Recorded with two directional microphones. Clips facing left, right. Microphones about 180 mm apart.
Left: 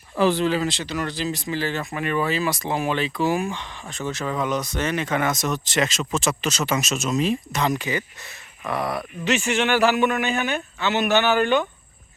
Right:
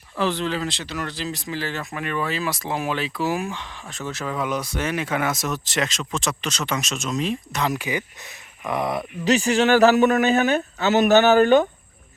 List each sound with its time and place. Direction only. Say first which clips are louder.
0.2 s speech: left 4 dB; 10° left (ahead or behind); by 9.0 s 20° right (ahead or behind)
9.2 s speech: right 4 dB; 35° right (ahead or behind)